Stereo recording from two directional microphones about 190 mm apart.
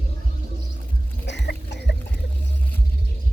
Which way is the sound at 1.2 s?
65° left (ahead or behind).